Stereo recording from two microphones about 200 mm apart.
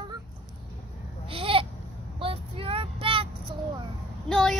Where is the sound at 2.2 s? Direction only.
25° right (ahead or behind).